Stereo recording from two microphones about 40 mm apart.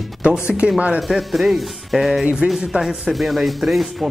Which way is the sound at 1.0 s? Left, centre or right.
Centre.